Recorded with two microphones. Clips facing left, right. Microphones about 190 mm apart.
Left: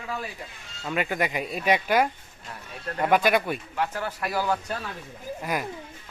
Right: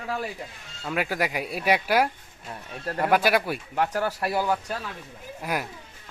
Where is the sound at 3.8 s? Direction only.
40° right (ahead or behind).